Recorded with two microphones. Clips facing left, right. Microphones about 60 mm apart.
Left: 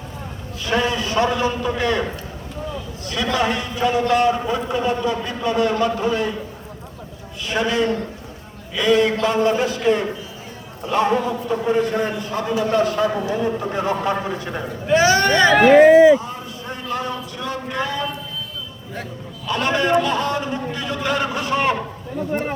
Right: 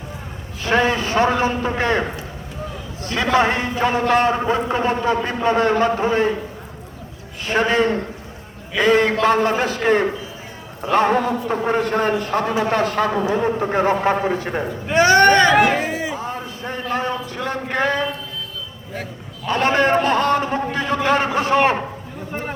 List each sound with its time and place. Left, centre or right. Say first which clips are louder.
0.6 s a man's voice: right 3 dB; right
3.1 s a man's voice: right 4 dB; right
7.4 s a man's voice: right 2 dB; right
15.1 s hubbub: right 4 dB; right
15.4 s speech: left 1 dB; centre
16.1 s a sound: left 3 dB; right
16.9 s a man's voice: right 2 dB; right
19.5 s a man's voice: right 2 dB; right